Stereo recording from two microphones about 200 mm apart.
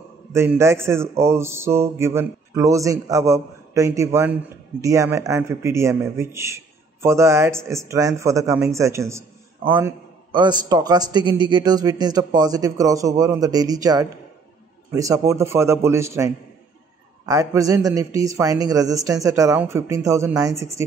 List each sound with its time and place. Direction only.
0.3 s a man's voice: 15° right (ahead or behind)